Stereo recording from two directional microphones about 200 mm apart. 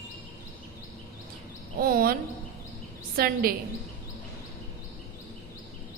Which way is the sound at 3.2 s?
45° right (ahead or behind).